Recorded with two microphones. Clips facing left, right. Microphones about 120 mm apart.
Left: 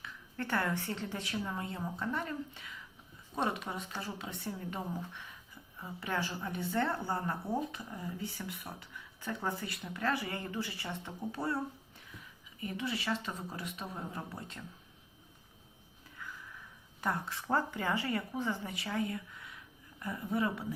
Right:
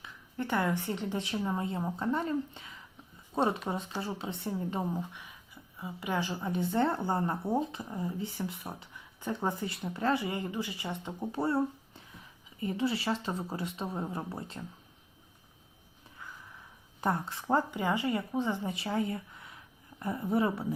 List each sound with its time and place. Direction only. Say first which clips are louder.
0.0 s a woman's voice: right 3 dB; 15° right (ahead or behind)
17.0 s a woman's voice: right 4 dB; 30° right (ahead or behind)
17.5 s a woman's voice: right 4 dB; 15° right (ahead or behind)